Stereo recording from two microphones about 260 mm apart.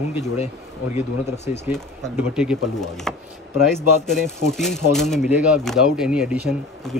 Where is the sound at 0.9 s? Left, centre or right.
Left.